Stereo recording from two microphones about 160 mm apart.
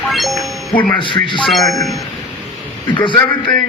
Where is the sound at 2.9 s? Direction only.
30° left (ahead or behind).